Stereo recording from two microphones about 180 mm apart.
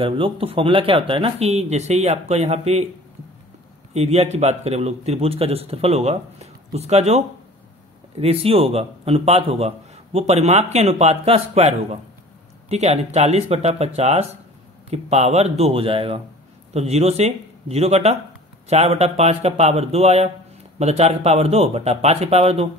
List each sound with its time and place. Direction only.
0.0 s a man's voice: 30° right (ahead or behind)
3.9 s a man's voice: 35° right (ahead or behind)